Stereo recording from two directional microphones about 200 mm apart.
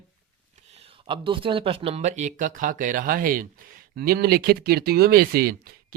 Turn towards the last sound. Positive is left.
turn(degrees=-50)  # may be behind; listen again after turning